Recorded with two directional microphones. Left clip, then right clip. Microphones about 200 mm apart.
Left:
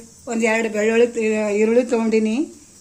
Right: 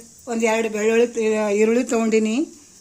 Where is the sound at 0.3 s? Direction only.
40° right (ahead or behind).